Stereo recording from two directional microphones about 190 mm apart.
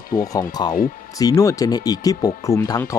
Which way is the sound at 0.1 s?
20° left (ahead or behind).